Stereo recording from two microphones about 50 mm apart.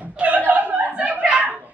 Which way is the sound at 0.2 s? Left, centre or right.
Right.